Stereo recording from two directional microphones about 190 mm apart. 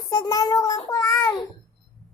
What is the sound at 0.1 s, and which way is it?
Child singing, 20° left (ahead or behind).